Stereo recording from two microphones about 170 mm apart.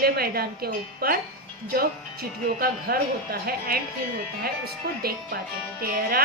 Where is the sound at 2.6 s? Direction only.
60° right (ahead or behind).